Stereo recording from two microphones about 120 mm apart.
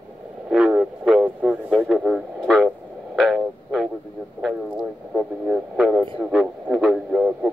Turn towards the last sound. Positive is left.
turn(degrees=-5)  # may be behind; listen again after turning